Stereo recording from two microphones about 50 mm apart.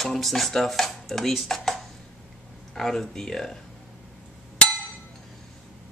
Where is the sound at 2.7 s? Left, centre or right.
Centre.